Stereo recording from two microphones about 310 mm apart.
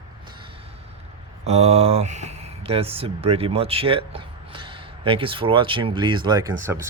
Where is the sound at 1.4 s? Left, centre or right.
Centre.